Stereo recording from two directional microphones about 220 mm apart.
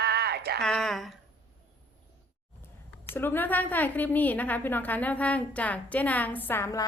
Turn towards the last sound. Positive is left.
turn(degrees=10)  # may be behind; listen again after turning